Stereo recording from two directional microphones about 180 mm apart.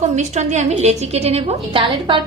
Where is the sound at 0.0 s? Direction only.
40° right (ahead or behind).